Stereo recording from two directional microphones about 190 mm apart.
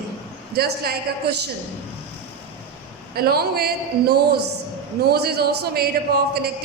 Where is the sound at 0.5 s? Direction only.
55° right (ahead or behind).